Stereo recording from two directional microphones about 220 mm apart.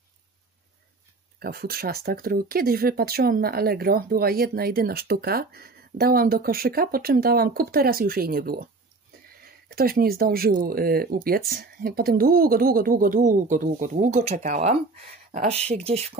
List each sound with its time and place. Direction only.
1.4 s speech: 45° right (ahead or behind); by 16.0 s 30° right (ahead or behind)